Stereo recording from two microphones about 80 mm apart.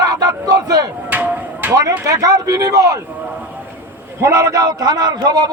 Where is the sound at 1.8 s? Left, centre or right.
Right.